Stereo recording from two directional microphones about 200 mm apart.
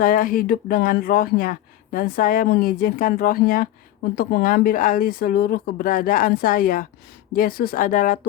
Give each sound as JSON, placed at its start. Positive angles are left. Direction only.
{"t": 0.0, "sound": "speech", "side_deg": 45}